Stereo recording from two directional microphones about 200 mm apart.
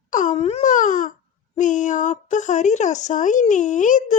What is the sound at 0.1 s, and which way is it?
Wail, 40° left (ahead or behind).